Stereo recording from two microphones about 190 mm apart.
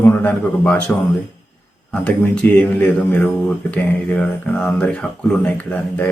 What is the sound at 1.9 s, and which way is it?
Speech, 5° left (ahead or behind).